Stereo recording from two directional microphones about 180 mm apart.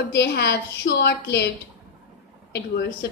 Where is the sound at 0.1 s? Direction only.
65° left (ahead or behind).